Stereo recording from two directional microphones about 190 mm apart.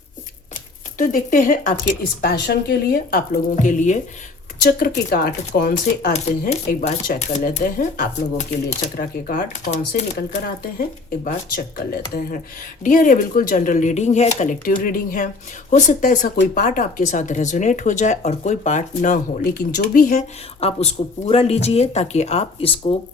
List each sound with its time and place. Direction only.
0.9 s speech: 45° left (ahead or behind)
2.2 s speech: 60° left (ahead or behind); by 23.0 s 30° left (ahead or behind)